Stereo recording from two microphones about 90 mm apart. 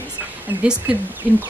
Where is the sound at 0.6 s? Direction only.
15° right (ahead or behind).